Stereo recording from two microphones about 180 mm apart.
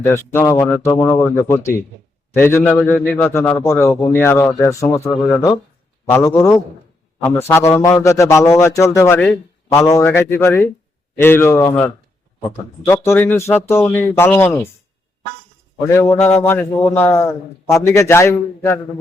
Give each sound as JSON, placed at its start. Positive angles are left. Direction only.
{"t": 0.0, "sound": "a man's voice", "side_deg": 15}
{"t": 9.7, "sound": "a man's voice", "side_deg": 20}
{"t": 15.9, "sound": "a man's voice", "side_deg": 15}